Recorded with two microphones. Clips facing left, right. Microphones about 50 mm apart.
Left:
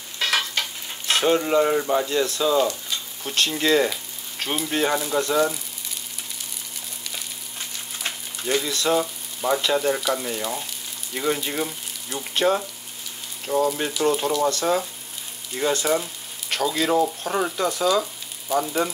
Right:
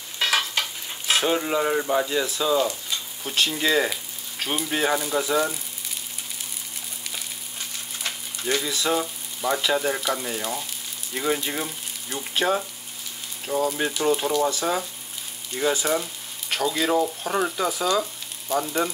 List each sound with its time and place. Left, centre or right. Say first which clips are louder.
0.2 s stir: even; centre
3.3 s speech: left 2 dB; centre
8.5 s speech: left 3 dB; centre